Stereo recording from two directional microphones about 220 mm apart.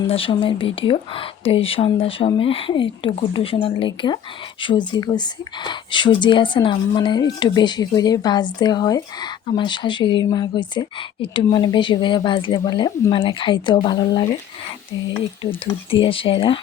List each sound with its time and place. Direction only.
0.1 s speech: 25° left (ahead or behind)
15.6 s speech: 25° left (ahead or behind)